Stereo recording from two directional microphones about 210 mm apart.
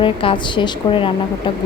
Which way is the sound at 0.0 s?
25° left (ahead or behind).